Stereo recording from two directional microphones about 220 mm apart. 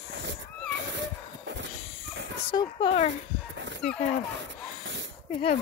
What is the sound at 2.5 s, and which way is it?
Speech, 25° left (ahead or behind).